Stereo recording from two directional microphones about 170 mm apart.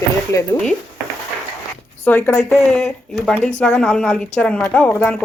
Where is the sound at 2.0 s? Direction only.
10° left (ahead or behind).